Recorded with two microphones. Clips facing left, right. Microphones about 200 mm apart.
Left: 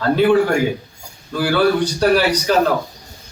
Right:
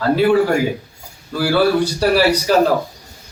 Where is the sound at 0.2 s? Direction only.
5° right (ahead or behind).